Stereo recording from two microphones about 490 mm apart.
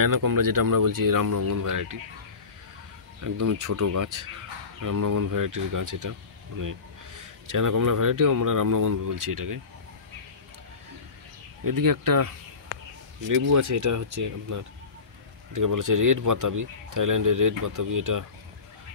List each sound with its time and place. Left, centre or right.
0.0 s speech: right
3.3 s speech: right
11.6 s speech: right
13.3 s speech: right